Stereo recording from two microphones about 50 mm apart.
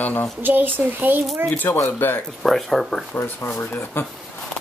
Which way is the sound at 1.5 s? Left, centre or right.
Left.